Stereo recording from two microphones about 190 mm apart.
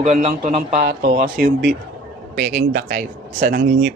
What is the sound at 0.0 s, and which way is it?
Speech, 40° right (ahead or behind).